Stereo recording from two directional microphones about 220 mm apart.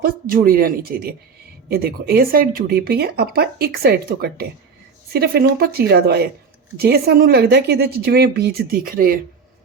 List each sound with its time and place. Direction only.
0.0 s speech: 40° right (ahead or behind)